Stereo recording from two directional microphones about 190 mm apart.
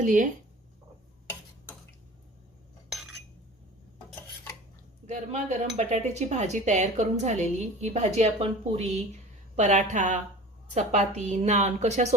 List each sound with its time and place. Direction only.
0.0 s speech: 40° right (ahead or behind)
2.9 s cutlery: centre (ahead or behind)
5.0 s speech: 40° right (ahead or behind)